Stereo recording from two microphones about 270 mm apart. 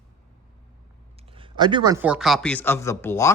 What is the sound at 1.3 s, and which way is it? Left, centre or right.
A man's voice, centre.